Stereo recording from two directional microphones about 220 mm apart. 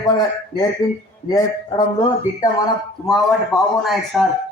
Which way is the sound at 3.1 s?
Centre (ahead or behind).